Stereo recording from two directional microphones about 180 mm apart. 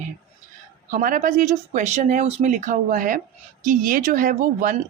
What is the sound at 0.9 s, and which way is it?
A woman's voice, 50° right (ahead or behind).